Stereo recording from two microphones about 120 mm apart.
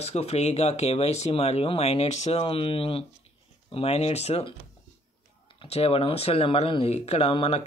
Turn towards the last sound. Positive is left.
turn(degrees=60)  # may be behind; listen again after turning